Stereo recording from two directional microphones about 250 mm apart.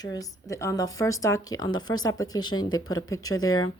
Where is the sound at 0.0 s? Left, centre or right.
Centre.